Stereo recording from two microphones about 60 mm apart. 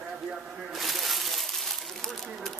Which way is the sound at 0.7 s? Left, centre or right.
Centre.